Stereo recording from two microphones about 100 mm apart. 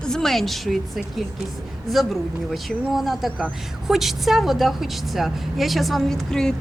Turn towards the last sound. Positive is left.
turn(degrees=5)  # may be behind; listen again after turning